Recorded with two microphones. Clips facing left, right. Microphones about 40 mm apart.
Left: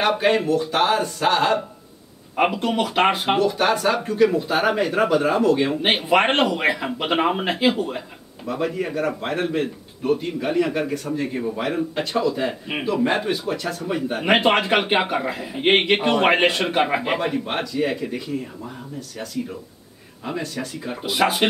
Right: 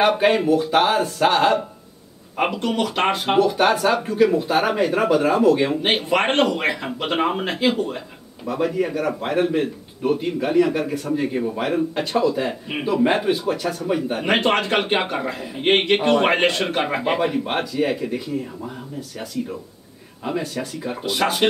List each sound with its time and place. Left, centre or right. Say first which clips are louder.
0.0 s speech: right 2 dB; centre
2.3 s a man's voice: left 1 dB; centre
3.3 s a man's voice: right 2 dB; centre
20.2 s speech: right 2 dB; centre
21.0 s a man's voice: left 1 dB; centre